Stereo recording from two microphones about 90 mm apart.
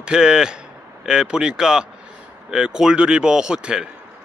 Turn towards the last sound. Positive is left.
turn(degrees=-10)  # may be behind; listen again after turning